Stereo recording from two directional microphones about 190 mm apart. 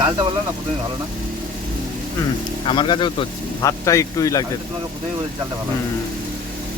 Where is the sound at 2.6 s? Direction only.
25° left (ahead or behind).